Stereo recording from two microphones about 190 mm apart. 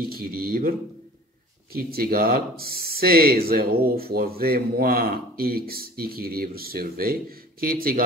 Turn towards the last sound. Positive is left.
turn(degrees=-50)  # may be behind; listen again after turning